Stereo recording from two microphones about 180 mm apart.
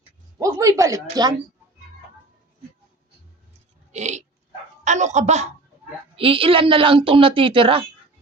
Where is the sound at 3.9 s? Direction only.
40° right (ahead or behind).